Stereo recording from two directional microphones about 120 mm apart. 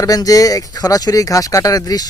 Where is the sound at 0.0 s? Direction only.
30° left (ahead or behind).